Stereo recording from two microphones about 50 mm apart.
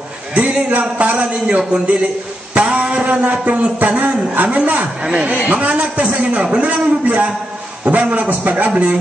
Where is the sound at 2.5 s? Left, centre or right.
Right.